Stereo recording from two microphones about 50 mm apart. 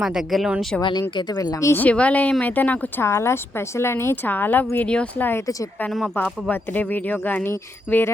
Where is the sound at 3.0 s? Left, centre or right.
Left.